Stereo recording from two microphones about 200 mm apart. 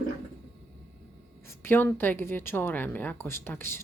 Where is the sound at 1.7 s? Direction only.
10° left (ahead or behind).